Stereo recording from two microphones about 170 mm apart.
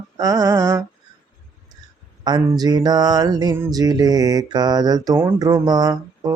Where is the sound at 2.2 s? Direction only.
25° right (ahead or behind).